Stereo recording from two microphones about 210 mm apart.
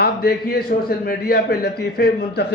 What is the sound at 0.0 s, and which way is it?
A man's voice, 45° left (ahead or behind).